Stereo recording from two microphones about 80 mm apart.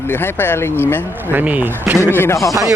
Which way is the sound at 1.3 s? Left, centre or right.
Right.